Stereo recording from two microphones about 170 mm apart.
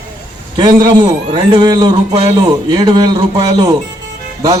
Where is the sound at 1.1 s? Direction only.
25° right (ahead or behind).